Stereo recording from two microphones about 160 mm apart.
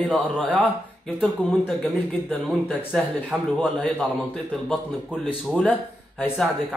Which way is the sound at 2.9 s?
5° left (ahead or behind).